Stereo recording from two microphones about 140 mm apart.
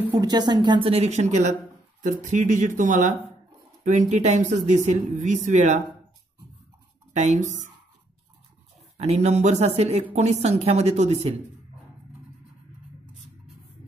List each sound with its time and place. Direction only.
0.2 s speech: 30° right (ahead or behind); by 1.5 s 55° right (ahead or behind)
2.0 s speech: 65° right (ahead or behind)
7.2 s speech: 55° right (ahead or behind)
8.9 s speech: 50° right (ahead or behind)